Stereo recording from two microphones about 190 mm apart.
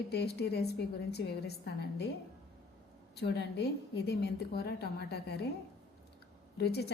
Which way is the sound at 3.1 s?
60° left (ahead or behind).